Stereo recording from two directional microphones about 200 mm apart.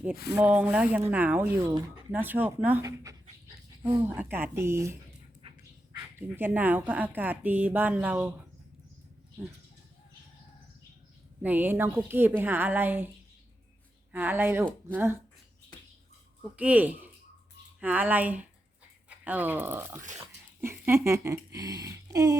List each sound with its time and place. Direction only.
0.3 s speech: 5° right (ahead or behind)
6.1 s speech: 10° right (ahead or behind)
11.4 s speech: 10° right (ahead or behind)
14.1 s speech: 10° right (ahead or behind)
16.6 s speech: 5° right (ahead or behind)